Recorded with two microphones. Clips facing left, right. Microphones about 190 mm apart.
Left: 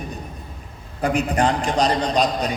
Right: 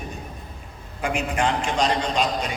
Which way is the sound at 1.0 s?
35° left (ahead or behind).